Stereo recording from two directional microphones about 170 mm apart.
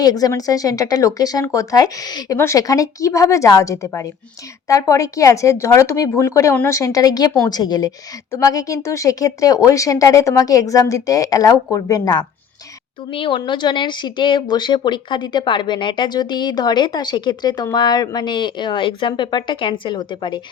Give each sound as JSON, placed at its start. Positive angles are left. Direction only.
{"t": 0.0, "sound": "speech", "side_deg": 20}